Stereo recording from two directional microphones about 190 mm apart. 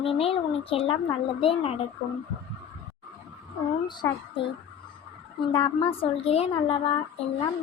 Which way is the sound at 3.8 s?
25° left (ahead or behind).